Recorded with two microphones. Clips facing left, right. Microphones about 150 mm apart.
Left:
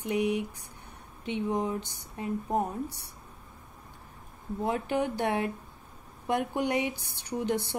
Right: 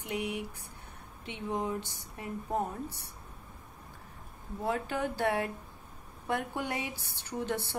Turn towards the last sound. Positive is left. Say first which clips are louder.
# left 4 dB
turn(degrees=15)  # may be behind; listen again after turning